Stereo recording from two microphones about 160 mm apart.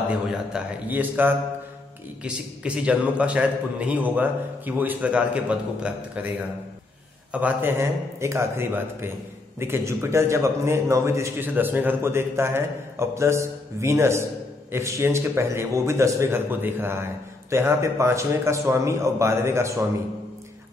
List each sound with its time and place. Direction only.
0.3 s a man's voice: 5° right (ahead or behind)
7.3 s a man's voice: 10° right (ahead or behind)